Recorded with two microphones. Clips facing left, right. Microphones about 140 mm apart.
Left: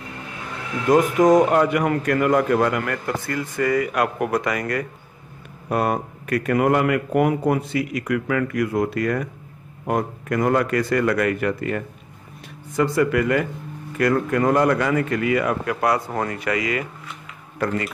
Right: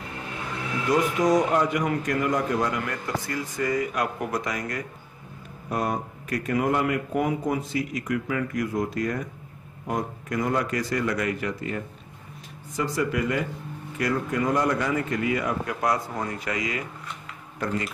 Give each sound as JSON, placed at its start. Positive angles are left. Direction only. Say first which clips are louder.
{"t": 0.8, "sound": "a man's voice", "louder": "left 7 dB", "side_deg": 50}